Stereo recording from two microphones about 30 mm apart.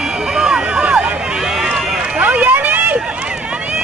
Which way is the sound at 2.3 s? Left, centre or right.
Right.